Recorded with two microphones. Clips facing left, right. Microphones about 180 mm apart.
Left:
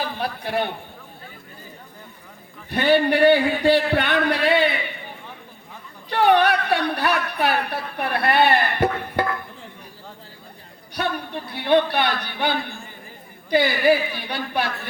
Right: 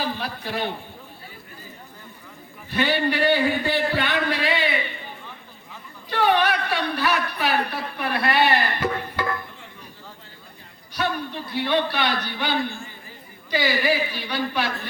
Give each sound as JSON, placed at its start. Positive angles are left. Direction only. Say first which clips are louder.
{"t": 0.2, "sound": "a man's voice", "louder": "left 4 dB", "side_deg": 55}
{"t": 2.6, "sound": "a man's voice", "louder": "left 5 dB", "side_deg": 60}
{"t": 6.1, "sound": "a woman's voice", "louder": "left 3 dB", "side_deg": 60}
{"t": 11.4, "sound": "a man's voice", "louder": "left 5 dB", "side_deg": 60}